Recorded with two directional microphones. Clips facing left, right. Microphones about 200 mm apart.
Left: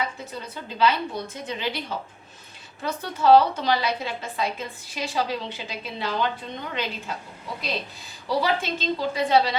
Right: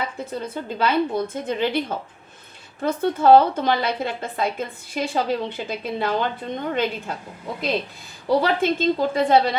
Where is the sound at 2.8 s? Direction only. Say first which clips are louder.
Right 4 dB; 55° right (ahead or behind).